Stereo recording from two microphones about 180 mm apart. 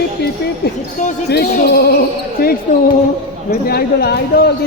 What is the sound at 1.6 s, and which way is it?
Speech, 65° left (ahead or behind).